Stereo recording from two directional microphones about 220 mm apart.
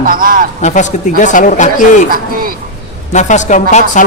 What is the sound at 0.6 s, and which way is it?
A man's voice, 35° left (ahead or behind).